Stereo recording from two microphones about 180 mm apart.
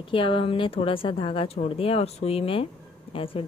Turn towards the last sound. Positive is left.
turn(degrees=30)  # may be behind; listen again after turning